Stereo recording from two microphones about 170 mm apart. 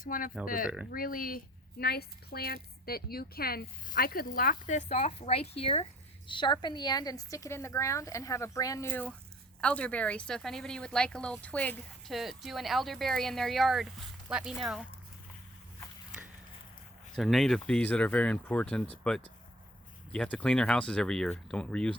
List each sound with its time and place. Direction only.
0.0 s a woman's voice: 55° left (ahead or behind); by 14.8 s centre (ahead or behind)
17.2 s speech: centre (ahead or behind)
20.1 s speech: 5° left (ahead or behind)